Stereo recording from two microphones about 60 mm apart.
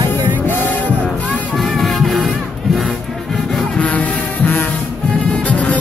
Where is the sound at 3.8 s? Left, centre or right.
Left.